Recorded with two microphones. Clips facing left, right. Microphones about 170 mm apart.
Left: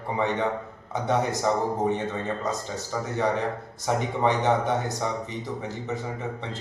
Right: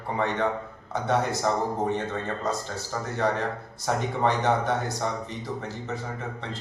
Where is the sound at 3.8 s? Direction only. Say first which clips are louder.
Left 1 dB; 20° left (ahead or behind).